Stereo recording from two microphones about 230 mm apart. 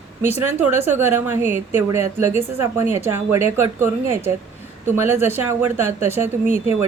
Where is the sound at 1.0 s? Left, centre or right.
Centre.